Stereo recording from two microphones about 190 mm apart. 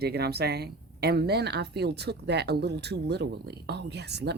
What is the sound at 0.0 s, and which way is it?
Speech, 60° right (ahead or behind).